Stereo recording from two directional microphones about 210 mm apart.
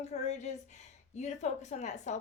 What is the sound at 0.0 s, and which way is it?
A woman's voice, 30° left (ahead or behind).